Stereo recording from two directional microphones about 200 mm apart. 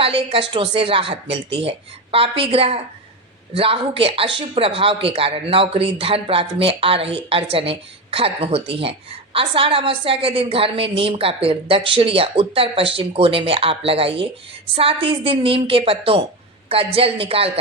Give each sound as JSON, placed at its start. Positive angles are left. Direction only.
{"t": 0.0, "sound": "a woman's voice", "side_deg": -25}